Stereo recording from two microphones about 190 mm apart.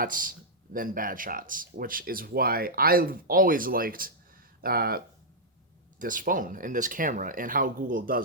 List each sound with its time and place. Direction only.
0.0 s speech: 45° right (ahead or behind)